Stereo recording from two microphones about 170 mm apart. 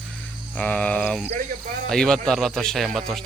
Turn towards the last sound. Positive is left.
turn(degrees=0)  # may be behind; listen again after turning